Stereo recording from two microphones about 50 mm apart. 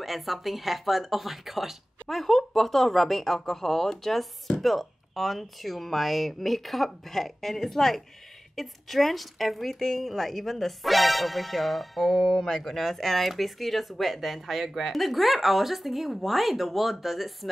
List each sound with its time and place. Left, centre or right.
0.0 s a woman's voice: centre